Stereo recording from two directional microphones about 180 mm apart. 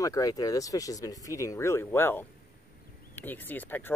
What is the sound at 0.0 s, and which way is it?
Speech, 20° left (ahead or behind).